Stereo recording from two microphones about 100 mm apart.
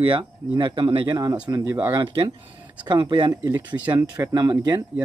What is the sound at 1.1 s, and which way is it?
Speech, 40° right (ahead or behind).